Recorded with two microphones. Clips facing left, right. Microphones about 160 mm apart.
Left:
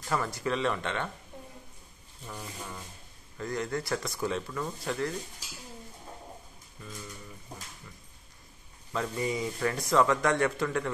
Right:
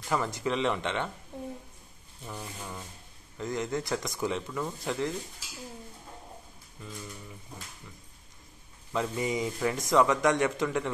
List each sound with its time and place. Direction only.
0.1 s speech: 20° right (ahead or behind)
2.2 s speech: 10° right (ahead or behind)
8.9 s speech: 15° right (ahead or behind)